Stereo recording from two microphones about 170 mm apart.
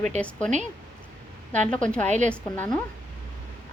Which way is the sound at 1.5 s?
5° left (ahead or behind).